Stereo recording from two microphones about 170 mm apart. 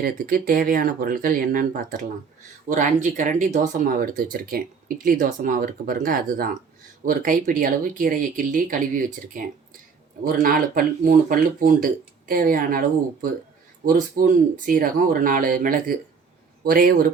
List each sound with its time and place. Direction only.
0.0 s speech: 60° right (ahead or behind)
13.8 s speech: 50° right (ahead or behind)